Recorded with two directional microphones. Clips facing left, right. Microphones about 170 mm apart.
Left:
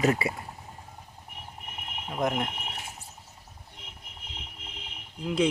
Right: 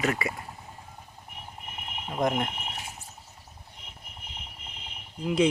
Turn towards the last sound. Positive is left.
turn(degrees=0)  # may be behind; listen again after turning